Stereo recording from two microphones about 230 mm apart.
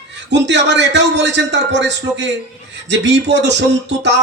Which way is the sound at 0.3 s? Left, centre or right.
Right.